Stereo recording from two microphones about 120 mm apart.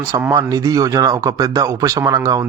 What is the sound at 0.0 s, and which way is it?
A man's voice, 25° right (ahead or behind).